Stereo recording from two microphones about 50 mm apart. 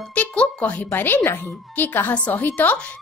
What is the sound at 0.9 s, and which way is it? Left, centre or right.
A woman's voice, left.